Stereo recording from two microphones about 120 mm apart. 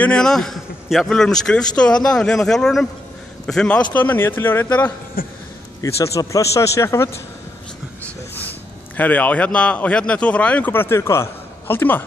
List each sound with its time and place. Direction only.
0.0 s a man's voice: 5° left (ahead or behind)
5.8 s speech: 25° left (ahead or behind)
8.9 s speech: 15° left (ahead or behind)